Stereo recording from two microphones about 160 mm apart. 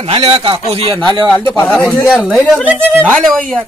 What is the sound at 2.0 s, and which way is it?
Speech, centre (ahead or behind).